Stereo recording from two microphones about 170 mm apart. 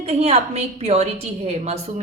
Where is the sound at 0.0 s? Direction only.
35° right (ahead or behind).